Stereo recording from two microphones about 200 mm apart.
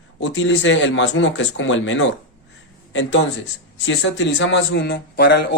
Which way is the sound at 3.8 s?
65° left (ahead or behind).